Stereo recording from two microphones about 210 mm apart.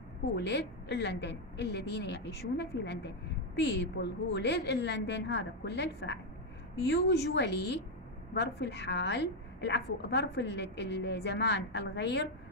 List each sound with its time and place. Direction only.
0.4 s a woman's voice: 55° left (ahead or behind)